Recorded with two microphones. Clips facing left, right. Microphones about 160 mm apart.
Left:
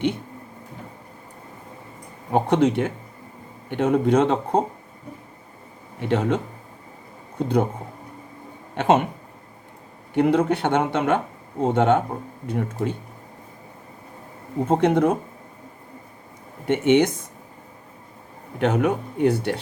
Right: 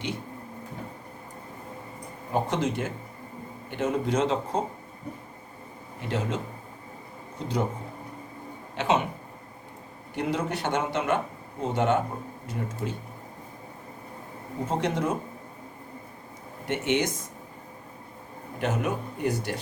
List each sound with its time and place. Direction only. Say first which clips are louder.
2.3 s speech: left 8 dB; 60° left (ahead or behind)
6.0 s speech: left 8 dB; 65° left (ahead or behind)
8.7 s speech: left 6 dB; 55° left (ahead or behind)
10.2 s speech: left 10 dB; 55° left (ahead or behind)
14.7 s speech: left 9 dB; 55° left (ahead or behind)
16.6 s speech: left 9 dB; 55° left (ahead or behind)
18.6 s speech: left 7 dB; 60° left (ahead or behind)